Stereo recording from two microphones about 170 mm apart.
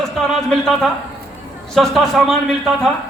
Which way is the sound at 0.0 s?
Centre (ahead or behind).